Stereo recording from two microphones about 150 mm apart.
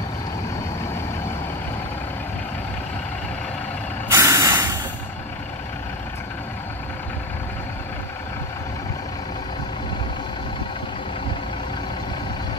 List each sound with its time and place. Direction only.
4.1 s spray: 20° right (ahead or behind)